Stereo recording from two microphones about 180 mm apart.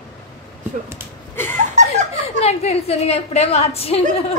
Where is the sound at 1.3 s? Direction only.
10° left (ahead or behind).